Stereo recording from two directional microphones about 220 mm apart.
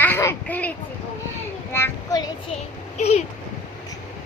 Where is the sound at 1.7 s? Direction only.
10° left (ahead or behind).